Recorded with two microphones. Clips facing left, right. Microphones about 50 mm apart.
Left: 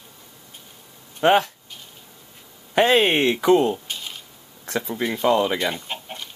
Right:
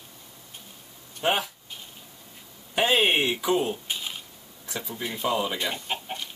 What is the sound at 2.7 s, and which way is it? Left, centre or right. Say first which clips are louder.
Speech: left 5 dB; left.